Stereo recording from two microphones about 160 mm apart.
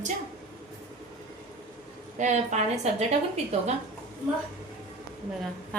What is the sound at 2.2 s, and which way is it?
Speech, 45° right (ahead or behind).